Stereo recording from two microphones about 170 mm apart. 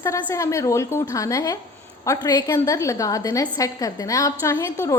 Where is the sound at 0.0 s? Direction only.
15° left (ahead or behind).